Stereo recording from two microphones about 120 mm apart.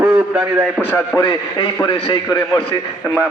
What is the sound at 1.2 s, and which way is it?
A man's voice, 40° left (ahead or behind).